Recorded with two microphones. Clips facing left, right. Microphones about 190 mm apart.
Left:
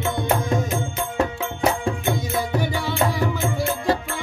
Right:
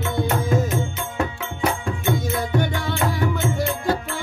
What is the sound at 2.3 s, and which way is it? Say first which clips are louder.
Music: even; centre (ahead or behind).